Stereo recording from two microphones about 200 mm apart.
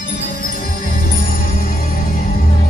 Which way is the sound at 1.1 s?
45° left (ahead or behind).